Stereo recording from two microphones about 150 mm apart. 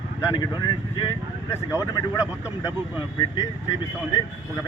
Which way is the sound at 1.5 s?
20° left (ahead or behind).